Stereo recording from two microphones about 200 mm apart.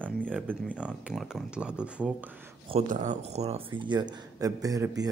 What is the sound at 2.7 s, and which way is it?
Speech, 35° right (ahead or behind).